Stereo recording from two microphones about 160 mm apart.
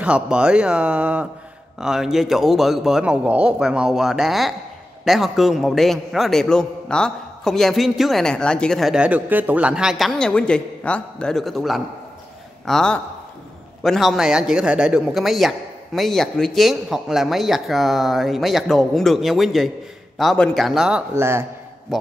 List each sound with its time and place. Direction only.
0.0 s a man's voice: 5° right (ahead or behind)
21.1 s speech: 15° right (ahead or behind)